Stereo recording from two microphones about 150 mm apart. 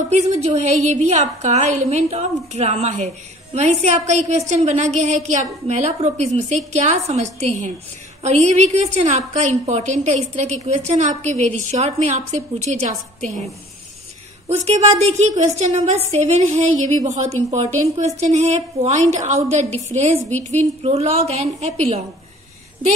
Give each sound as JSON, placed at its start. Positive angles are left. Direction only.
{"t": 0.1, "sound": "a woman's voice", "side_deg": -50}
{"t": 14.6, "sound": "a woman's voice", "side_deg": -45}